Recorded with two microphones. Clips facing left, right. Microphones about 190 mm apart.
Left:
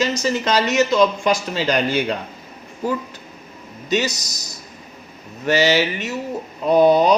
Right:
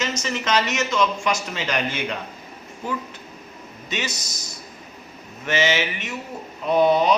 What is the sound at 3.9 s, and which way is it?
Speech, 40° left (ahead or behind).